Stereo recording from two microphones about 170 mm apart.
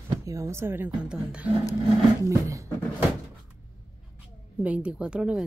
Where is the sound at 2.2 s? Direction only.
20° right (ahead or behind).